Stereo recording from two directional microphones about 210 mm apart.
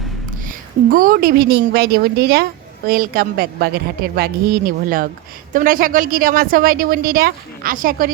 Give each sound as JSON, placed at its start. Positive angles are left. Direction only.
{"t": 0.3, "sound": "a woman's voice", "side_deg": -40}